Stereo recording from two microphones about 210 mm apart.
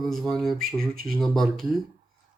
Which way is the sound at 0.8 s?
45° right (ahead or behind).